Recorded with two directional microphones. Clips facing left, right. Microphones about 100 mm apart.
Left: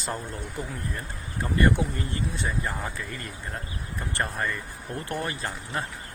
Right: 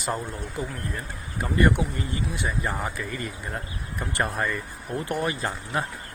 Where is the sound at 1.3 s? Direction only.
15° right (ahead or behind).